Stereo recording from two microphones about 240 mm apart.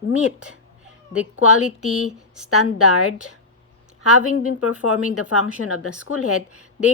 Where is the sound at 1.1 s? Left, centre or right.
Left.